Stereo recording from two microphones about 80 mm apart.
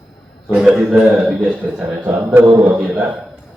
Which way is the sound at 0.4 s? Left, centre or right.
Centre.